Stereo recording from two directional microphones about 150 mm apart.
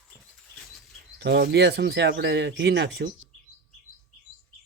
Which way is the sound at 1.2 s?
90° right.